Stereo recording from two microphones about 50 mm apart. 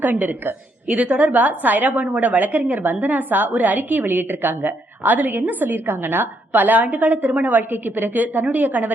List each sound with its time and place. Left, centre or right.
0.0 s a woman's voice: right